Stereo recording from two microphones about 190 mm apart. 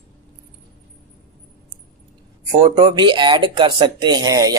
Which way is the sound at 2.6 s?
25° right (ahead or behind).